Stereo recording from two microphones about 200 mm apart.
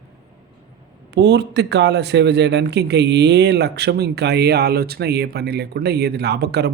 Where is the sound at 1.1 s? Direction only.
60° right (ahead or behind).